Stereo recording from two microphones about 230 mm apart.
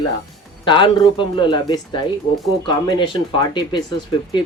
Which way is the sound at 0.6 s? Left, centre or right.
Left.